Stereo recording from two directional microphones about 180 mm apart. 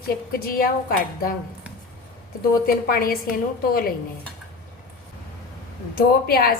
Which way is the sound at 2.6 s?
55° left (ahead or behind).